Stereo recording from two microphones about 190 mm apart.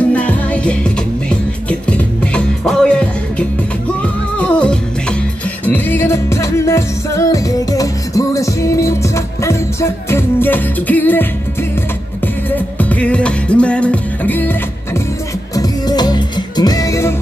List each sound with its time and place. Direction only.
0.1 s music: 5° left (ahead or behind)
12.4 s music: 10° left (ahead or behind)
15.5 s music: 20° left (ahead or behind)